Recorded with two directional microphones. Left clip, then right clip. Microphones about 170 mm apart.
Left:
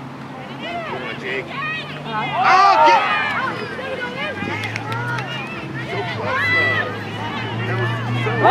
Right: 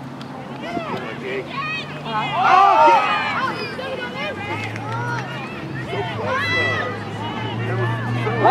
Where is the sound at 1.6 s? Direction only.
25° right (ahead or behind).